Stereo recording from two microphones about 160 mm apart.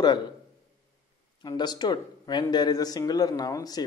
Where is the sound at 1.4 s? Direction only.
25° left (ahead or behind).